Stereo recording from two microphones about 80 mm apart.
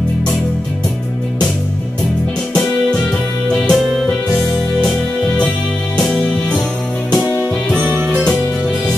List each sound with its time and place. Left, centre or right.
2.5 s music: centre
5.9 s music: centre
7.8 s music: right